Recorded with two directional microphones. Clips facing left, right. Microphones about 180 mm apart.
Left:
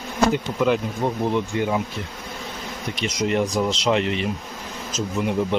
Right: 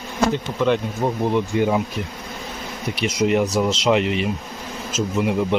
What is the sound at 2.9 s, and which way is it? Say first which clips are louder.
Speech: right 3 dB; 10° right (ahead or behind).